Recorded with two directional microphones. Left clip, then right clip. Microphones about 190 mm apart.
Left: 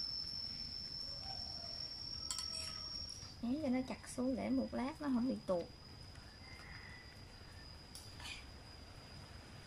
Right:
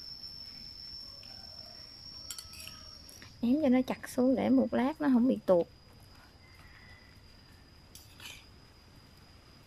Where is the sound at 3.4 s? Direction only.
50° right (ahead or behind).